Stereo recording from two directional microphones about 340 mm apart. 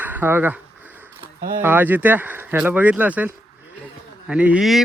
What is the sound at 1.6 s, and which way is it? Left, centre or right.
Speech, centre.